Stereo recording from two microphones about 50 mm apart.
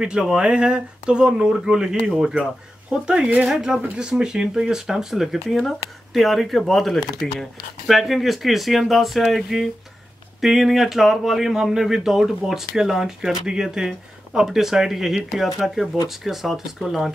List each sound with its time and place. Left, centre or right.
0.0 s speech: centre
2.9 s speech: centre